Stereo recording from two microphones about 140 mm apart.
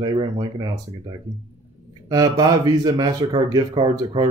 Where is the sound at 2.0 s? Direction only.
25° right (ahead or behind).